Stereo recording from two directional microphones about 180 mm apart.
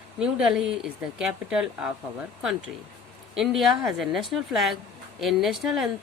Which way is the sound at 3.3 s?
Centre (ahead or behind).